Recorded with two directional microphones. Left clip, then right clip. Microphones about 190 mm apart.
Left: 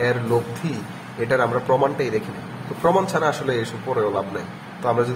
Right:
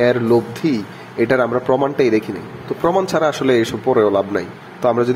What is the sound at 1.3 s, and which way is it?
A man's voice, 40° right (ahead or behind).